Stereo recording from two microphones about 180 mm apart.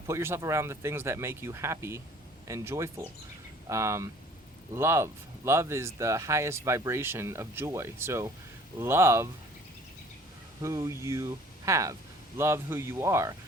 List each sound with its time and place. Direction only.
0.1 s speech: 15° right (ahead or behind)
10.6 s speech: 15° right (ahead or behind)